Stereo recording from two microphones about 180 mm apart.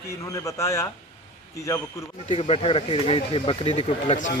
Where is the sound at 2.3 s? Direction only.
30° left (ahead or behind).